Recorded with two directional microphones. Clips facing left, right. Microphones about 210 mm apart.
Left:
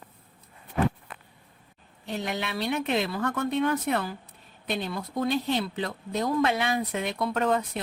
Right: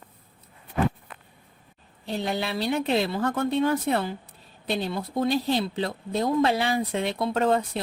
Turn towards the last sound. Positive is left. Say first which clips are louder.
# right 3 dB
turn(degrees=-30)  # may be behind; listen again after turning